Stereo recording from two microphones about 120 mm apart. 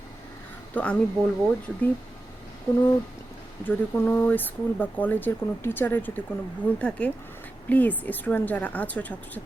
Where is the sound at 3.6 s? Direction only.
15° left (ahead or behind).